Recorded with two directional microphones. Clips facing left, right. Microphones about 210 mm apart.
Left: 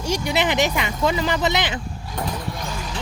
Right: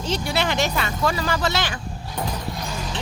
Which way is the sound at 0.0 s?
15° left (ahead or behind).